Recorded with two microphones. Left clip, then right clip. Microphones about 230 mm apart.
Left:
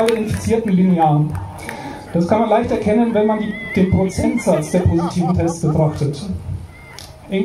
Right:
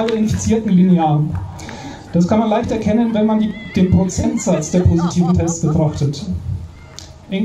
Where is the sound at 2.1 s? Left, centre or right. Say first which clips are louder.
Left 1 dB; right.